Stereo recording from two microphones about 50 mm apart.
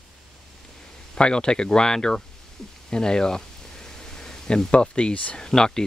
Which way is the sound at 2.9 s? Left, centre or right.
Centre.